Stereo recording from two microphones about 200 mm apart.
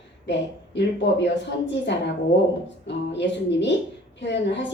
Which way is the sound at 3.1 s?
60° left (ahead or behind).